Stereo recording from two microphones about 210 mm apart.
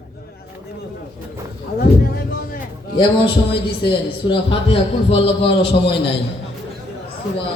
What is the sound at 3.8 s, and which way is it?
A man's voice, 25° left (ahead or behind).